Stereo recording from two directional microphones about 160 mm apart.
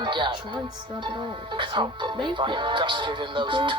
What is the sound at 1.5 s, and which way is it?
Speech, 30° right (ahead or behind).